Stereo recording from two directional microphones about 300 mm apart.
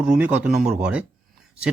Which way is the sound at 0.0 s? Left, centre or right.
Centre.